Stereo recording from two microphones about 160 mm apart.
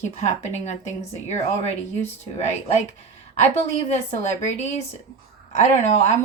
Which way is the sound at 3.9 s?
45° left (ahead or behind).